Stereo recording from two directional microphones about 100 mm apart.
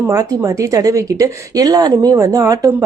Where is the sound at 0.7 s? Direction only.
35° right (ahead or behind).